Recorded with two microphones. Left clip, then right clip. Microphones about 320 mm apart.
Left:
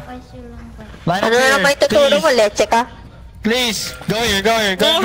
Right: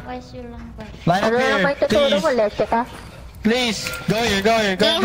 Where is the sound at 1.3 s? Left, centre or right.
Left.